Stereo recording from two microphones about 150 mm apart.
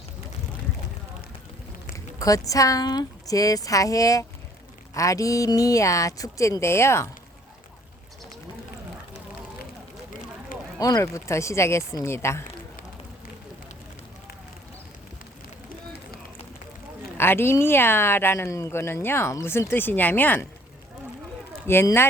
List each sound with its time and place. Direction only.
2.1 s speech: 20° left (ahead or behind)
10.8 s speech: 25° left (ahead or behind)
17.2 s speech: 15° left (ahead or behind)
21.7 s speech: 15° left (ahead or behind)